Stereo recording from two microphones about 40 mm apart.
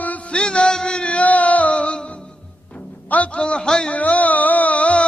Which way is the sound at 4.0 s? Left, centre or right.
Left.